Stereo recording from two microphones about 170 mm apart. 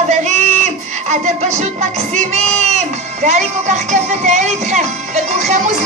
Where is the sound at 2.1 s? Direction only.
40° right (ahead or behind).